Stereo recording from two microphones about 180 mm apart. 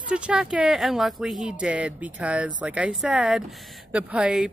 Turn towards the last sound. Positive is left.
turn(degrees=-5)  # may be behind; listen again after turning